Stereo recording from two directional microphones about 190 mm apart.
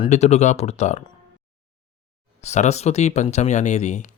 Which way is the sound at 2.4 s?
35° left (ahead or behind).